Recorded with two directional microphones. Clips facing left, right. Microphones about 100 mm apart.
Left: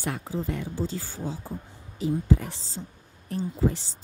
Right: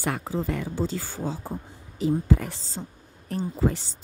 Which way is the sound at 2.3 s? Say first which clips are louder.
Right 1 dB; 65° right (ahead or behind).